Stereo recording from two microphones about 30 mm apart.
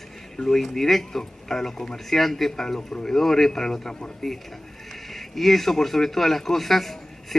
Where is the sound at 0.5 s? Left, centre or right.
Centre.